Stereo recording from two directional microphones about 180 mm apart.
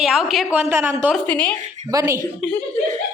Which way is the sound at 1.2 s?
5° left (ahead or behind).